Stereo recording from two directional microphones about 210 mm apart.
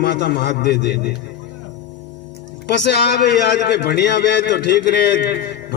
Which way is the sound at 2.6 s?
55° left (ahead or behind).